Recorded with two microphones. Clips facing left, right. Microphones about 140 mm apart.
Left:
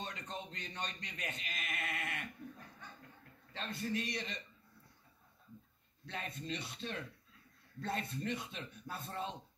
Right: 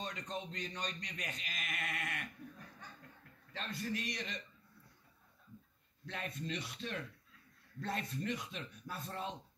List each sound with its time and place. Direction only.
0.0 s speech: 30° left (ahead or behind)
3.5 s speech: 30° left (ahead or behind)
6.0 s speech: 30° left (ahead or behind)